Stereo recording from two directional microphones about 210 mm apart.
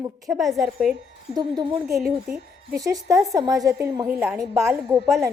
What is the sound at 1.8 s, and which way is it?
Speech, centre (ahead or behind).